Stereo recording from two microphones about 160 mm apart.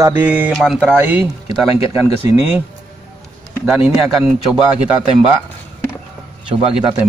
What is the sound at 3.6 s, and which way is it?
A man's voice, 5° right (ahead or behind).